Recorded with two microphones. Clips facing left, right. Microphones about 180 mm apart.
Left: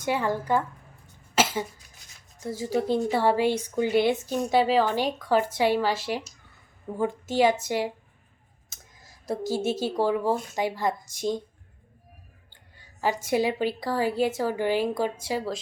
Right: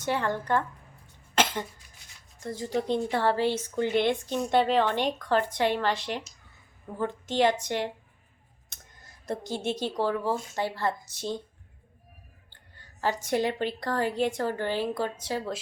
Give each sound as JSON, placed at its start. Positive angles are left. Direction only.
{"t": 0.0, "sound": "speech", "side_deg": 10}
{"t": 1.4, "sound": "cough", "side_deg": 5}
{"t": 2.4, "sound": "speech", "side_deg": 5}
{"t": 12.5, "sound": "speech", "side_deg": 10}